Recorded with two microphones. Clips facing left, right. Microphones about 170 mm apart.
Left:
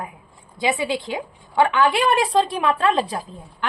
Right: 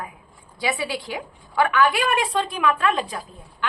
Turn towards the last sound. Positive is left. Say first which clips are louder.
# left 1 dB
turn(degrees=30)  # may be behind; listen again after turning